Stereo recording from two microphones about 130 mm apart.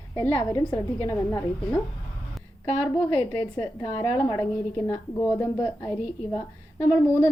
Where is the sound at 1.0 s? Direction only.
20° left (ahead or behind).